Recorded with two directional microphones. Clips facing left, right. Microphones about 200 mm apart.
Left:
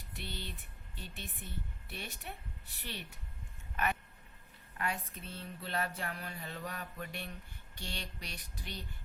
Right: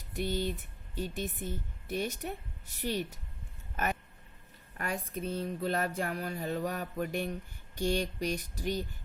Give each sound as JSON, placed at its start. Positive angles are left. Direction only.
{"t": 0.1, "sound": "a sound", "side_deg": -45}
{"t": 0.9, "sound": "speech", "side_deg": -40}
{"t": 4.8, "sound": "speech", "side_deg": -40}